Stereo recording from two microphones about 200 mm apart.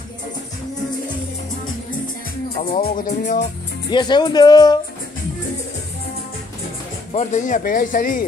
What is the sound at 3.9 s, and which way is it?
Speech, 20° left (ahead or behind).